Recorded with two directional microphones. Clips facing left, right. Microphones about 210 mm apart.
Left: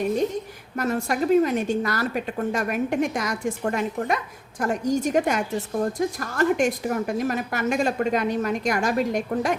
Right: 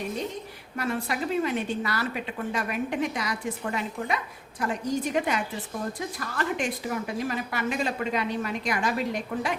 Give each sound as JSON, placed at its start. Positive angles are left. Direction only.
{"t": 0.8, "sound": "a woman's voice", "side_deg": 45}